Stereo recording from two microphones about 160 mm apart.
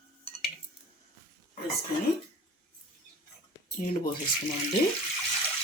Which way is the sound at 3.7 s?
60° left (ahead or behind).